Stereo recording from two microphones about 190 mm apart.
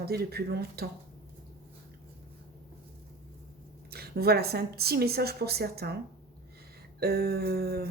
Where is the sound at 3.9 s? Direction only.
55° right (ahead or behind).